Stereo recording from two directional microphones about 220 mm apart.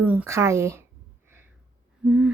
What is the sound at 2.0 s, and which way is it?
Owl, 5° right (ahead or behind).